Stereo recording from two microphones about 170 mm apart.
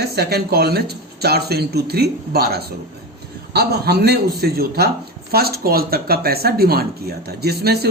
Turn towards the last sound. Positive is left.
turn(degrees=-70)  # may be behind; listen again after turning